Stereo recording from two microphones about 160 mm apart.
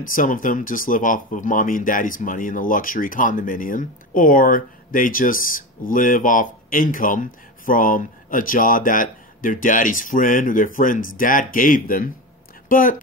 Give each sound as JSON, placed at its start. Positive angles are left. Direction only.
{"t": 0.0, "sound": "speech", "side_deg": 55}